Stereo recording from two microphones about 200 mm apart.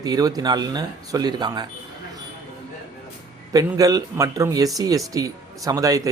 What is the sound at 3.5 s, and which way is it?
A man's voice, 15° right (ahead or behind).